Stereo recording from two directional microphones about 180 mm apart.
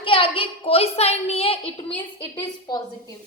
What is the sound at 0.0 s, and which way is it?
A woman's voice, 30° left (ahead or behind).